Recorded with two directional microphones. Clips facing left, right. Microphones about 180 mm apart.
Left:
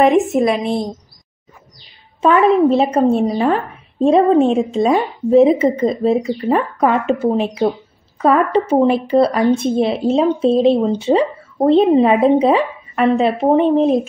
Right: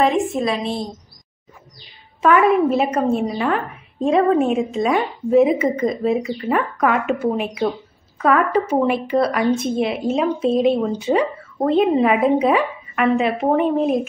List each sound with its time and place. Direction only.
0.0 s a woman's voice: 60° left (ahead or behind)
0.4 s a woman's voice: 20° left (ahead or behind)
2.2 s a woman's voice: 30° left (ahead or behind)